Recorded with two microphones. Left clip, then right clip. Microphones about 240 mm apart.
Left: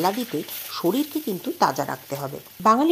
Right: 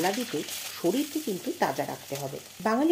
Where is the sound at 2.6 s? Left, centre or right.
Left.